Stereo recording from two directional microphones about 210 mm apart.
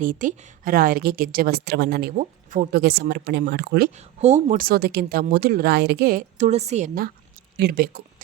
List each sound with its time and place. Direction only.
0.0 s a woman's voice: 40° right (ahead or behind)
3.9 s a woman's voice: 30° right (ahead or behind)